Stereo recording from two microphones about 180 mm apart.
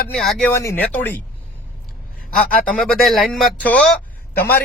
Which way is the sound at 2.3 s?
5° left (ahead or behind).